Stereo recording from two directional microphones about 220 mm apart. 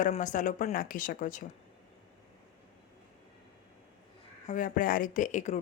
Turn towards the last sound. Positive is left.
turn(degrees=35)  # may be behind; listen again after turning